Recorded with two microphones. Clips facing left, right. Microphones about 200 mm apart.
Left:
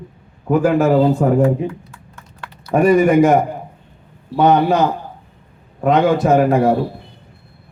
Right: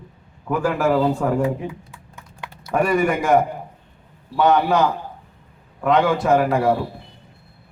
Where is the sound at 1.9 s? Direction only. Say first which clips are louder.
Left 1 dB; 15° right (ahead or behind).